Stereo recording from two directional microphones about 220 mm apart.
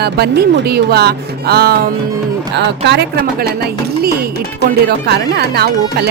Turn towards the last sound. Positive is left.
turn(degrees=-45)  # may be behind; listen again after turning